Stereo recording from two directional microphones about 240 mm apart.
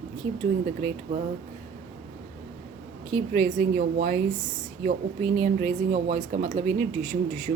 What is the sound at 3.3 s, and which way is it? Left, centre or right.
Speech, right.